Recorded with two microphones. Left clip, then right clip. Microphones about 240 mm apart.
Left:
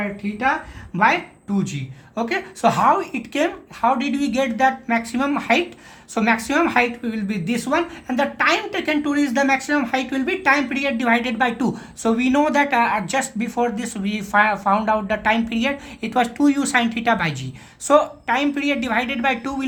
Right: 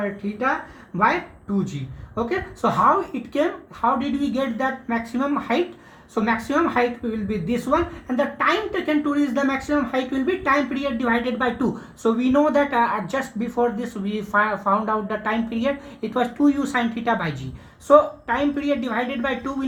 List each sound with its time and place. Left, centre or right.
2.1 s a woman's voice: left